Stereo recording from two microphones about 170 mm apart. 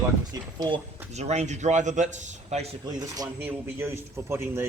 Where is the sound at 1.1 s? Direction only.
40° right (ahead or behind).